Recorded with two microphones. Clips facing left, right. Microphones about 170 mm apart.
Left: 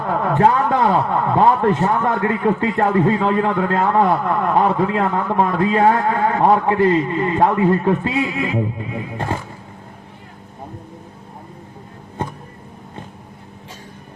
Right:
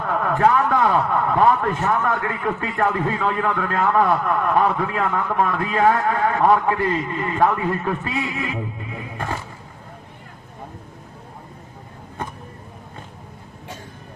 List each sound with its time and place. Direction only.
0.3 s a man's voice: 25° left (ahead or behind)